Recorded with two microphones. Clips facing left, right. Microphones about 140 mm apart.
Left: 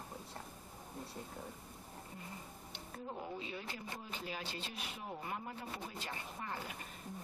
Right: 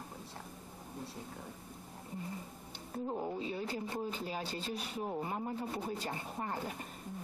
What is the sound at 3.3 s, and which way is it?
Speech, 35° right (ahead or behind).